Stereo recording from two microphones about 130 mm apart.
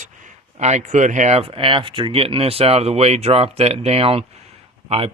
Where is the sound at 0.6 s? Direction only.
65° right (ahead or behind).